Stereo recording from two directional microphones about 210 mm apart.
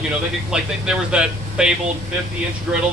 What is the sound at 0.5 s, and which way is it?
A man's voice, 5° right (ahead or behind).